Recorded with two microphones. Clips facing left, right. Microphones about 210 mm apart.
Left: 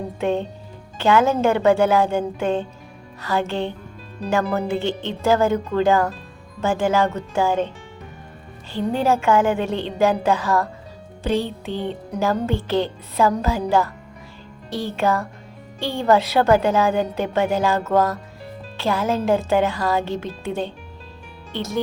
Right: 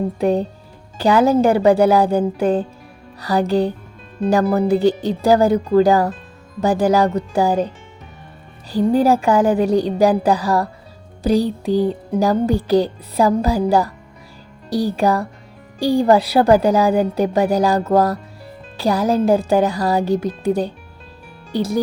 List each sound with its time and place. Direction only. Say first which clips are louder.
0.2 s speech: right 2 dB; 35° right (ahead or behind)
8.7 s speech: right 6 dB; 35° right (ahead or behind)